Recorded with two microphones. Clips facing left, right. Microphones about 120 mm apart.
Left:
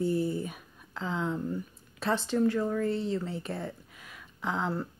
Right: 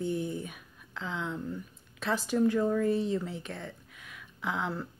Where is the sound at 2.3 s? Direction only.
15° right (ahead or behind).